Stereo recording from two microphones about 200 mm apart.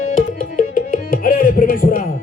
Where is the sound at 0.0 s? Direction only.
40° left (ahead or behind).